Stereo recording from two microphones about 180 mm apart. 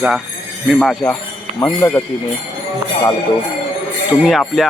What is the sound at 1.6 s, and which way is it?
Speech, 15° left (ahead or behind).